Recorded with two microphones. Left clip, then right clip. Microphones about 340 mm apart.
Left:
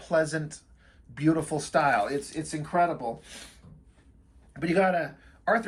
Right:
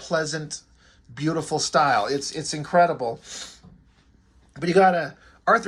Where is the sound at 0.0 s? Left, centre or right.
Centre.